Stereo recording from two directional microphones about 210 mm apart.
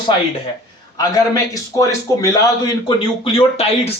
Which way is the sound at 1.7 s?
15° left (ahead or behind).